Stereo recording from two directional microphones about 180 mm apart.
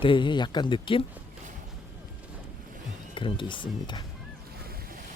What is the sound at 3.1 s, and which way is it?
Speech, 30° left (ahead or behind).